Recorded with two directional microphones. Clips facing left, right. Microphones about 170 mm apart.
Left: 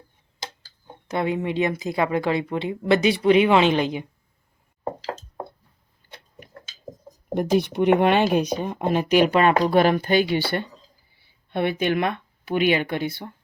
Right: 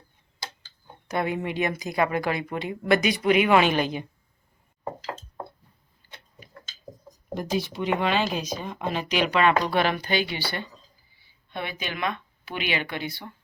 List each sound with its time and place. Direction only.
1.1 s speech: 20° left (ahead or behind)
6.0 s a sound: 50° left (ahead or behind)
7.3 s a woman's voice: 55° left (ahead or behind)